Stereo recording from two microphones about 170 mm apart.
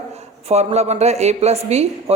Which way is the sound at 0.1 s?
40° right (ahead or behind).